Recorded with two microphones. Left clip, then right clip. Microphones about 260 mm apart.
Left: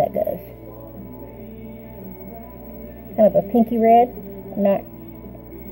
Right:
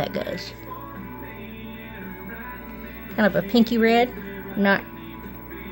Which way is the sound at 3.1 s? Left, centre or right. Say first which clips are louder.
Left 5 dB; right.